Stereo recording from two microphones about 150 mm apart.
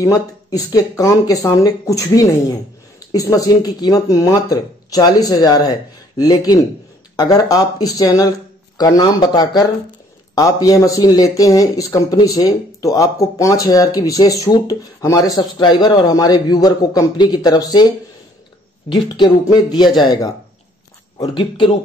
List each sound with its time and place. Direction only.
0.0 s speech: 25° left (ahead or behind)
19.1 s speech: 30° left (ahead or behind)